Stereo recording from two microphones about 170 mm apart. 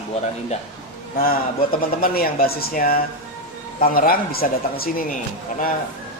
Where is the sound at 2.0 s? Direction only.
60° left (ahead or behind).